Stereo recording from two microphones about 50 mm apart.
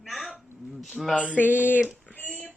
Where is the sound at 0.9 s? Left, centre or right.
Centre.